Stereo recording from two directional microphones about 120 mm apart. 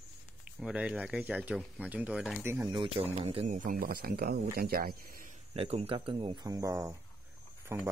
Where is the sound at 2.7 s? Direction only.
45° right (ahead or behind).